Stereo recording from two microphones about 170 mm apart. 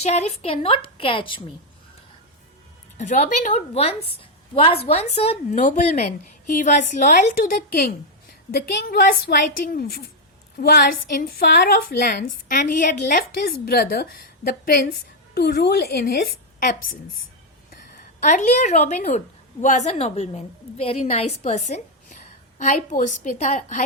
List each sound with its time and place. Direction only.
0.0 s a woman's voice: 40° left (ahead or behind)
3.0 s a woman's voice: 45° left (ahead or behind)
8.5 s a woman's voice: 65° left (ahead or behind); by 13.2 s 50° left (ahead or behind)
13.7 s a woman's voice: 65° left (ahead or behind)
18.2 s a woman's voice: 45° left (ahead or behind)